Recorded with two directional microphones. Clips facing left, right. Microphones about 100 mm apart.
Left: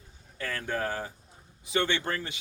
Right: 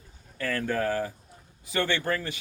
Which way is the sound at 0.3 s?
20° left (ahead or behind).